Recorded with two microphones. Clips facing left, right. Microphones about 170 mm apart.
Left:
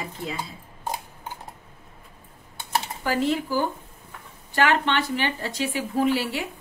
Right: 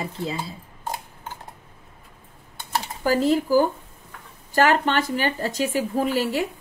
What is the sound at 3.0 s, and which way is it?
Speech, 40° right (ahead or behind).